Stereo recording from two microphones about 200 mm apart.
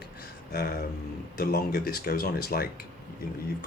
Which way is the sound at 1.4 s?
50° left (ahead or behind).